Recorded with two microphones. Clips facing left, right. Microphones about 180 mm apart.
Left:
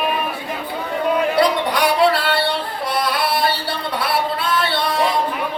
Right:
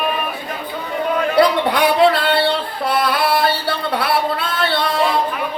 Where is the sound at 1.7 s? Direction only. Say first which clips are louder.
Right 2 dB; 50° right (ahead or behind).